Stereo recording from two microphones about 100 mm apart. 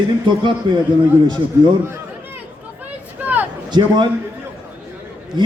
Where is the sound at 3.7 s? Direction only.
50° right (ahead or behind).